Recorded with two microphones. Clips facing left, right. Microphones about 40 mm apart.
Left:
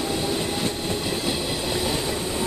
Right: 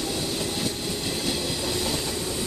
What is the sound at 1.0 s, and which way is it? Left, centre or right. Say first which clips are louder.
Train: left 2 dB; centre.